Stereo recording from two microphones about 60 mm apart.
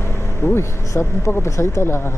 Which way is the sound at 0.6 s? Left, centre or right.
Left.